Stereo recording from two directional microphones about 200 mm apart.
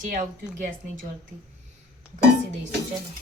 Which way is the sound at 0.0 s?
40° right (ahead or behind).